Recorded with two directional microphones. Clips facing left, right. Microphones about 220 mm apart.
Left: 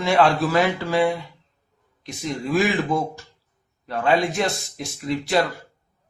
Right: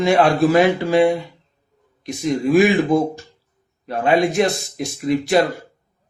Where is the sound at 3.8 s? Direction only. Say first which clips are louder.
Right 4 dB; 15° right (ahead or behind).